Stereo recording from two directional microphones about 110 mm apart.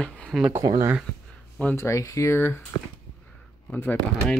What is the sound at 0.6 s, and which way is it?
Speech, 30° right (ahead or behind).